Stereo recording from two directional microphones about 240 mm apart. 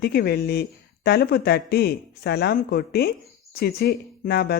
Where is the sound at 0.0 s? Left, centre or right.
Left.